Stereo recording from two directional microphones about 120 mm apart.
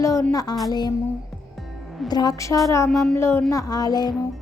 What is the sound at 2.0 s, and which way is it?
A woman's voice, 35° left (ahead or behind).